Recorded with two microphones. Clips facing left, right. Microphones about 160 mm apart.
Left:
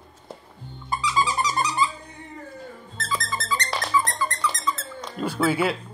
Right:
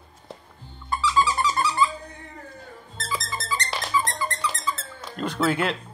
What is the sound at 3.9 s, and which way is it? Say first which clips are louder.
Squeak: left 1 dB; 15° right (ahead or behind).